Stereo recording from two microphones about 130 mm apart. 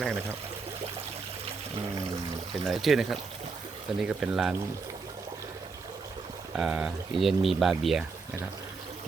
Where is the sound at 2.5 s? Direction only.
Centre (ahead or behind).